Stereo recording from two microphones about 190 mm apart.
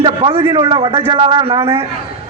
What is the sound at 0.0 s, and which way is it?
A man's voice, 30° right (ahead or behind).